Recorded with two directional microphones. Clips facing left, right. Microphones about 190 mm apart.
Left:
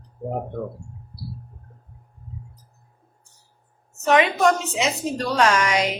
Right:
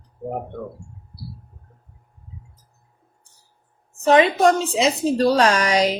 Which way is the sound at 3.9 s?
30° right (ahead or behind).